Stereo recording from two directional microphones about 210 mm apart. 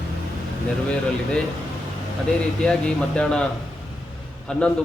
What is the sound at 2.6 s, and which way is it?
Speech, 5° left (ahead or behind).